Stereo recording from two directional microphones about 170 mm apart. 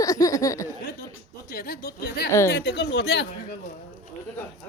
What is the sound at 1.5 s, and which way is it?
Speech, 65° left (ahead or behind).